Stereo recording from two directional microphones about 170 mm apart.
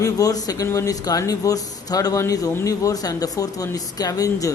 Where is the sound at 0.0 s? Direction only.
20° left (ahead or behind).